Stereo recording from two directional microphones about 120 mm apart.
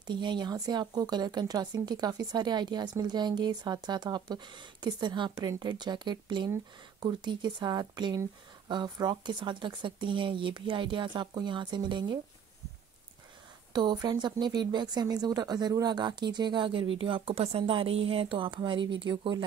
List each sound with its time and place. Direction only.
0.0 s speech: 40° right (ahead or behind)
13.7 s speech: 35° right (ahead or behind)